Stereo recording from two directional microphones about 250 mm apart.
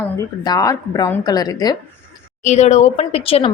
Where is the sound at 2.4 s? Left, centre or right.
Left.